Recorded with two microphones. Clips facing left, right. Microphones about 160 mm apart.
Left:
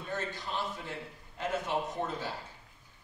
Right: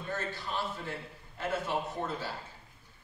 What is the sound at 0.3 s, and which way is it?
A man's voice, 15° left (ahead or behind).